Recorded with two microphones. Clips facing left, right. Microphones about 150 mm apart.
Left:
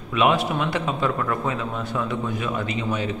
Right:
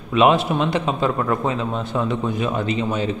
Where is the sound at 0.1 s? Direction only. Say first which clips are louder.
Right 4 dB; 25° right (ahead or behind).